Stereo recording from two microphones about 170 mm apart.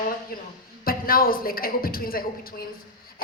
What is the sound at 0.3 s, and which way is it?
A woman's voice, 55° left (ahead or behind).